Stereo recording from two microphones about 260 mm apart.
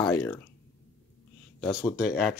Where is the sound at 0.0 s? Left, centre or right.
Centre.